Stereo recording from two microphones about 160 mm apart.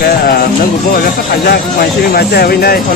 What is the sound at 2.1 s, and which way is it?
Speech, 75° left (ahead or behind).